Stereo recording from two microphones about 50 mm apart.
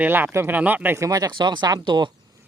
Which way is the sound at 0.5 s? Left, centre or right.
Right.